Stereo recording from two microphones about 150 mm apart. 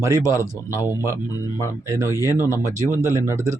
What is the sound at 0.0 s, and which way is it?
Speech, 20° right (ahead or behind).